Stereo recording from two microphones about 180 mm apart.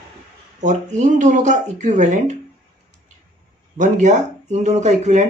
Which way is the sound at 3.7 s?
40° right (ahead or behind).